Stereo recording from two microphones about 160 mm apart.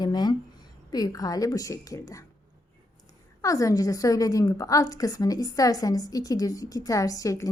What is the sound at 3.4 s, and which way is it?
A woman's voice, 20° left (ahead or behind).